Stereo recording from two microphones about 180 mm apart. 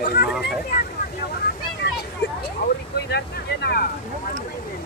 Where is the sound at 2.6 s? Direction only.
65° left (ahead or behind).